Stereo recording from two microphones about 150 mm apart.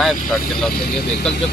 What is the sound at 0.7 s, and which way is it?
Speech, 90° left.